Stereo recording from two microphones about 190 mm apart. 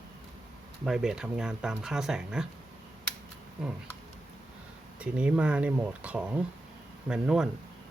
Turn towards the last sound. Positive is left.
turn(degrees=-5)  # may be behind; listen again after turning